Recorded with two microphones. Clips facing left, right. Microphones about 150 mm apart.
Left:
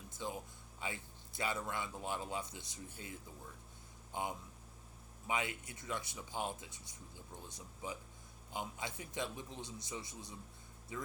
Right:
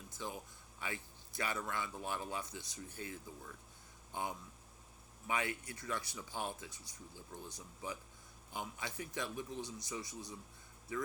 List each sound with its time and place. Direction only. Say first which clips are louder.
0.1 s a sound: left 2 dB; 20° left (ahead or behind)
0.8 s speech: even; 20° left (ahead or behind)
5.3 s speech: right 1 dB; 20° left (ahead or behind)